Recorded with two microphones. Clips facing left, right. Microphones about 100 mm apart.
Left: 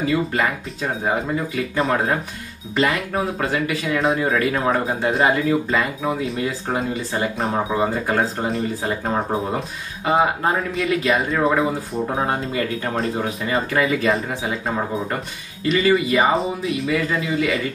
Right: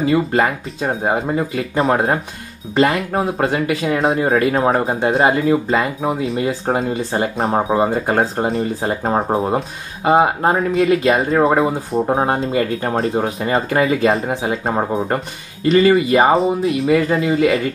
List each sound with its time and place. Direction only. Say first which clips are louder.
0.1 s speech: right 5 dB; 30° right (ahead or behind)
14.7 s speech: right 6 dB; 45° right (ahead or behind)